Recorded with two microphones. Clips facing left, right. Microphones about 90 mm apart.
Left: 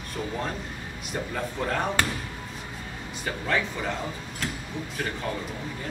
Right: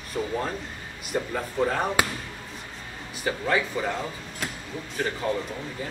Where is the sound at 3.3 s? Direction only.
5° right (ahead or behind).